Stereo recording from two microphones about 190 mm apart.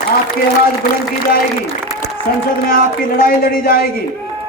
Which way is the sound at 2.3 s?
50° left (ahead or behind).